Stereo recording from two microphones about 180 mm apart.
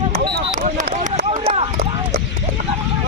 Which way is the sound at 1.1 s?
35° right (ahead or behind).